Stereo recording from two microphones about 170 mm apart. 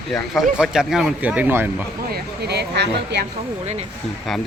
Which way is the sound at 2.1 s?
70° right (ahead or behind).